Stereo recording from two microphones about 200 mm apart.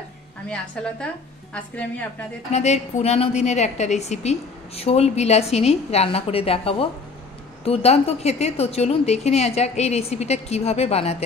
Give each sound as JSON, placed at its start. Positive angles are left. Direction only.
{"t": 1.5, "sound": "a woman's voice", "side_deg": 5}
{"t": 2.5, "sound": "a woman's voice", "side_deg": 35}